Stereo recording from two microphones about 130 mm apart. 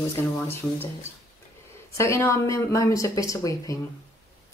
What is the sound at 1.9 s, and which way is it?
A woman's voice, 20° left (ahead or behind).